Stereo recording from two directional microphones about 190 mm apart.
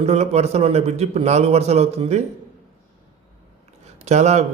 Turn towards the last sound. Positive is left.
turn(degrees=-35)  # may be behind; listen again after turning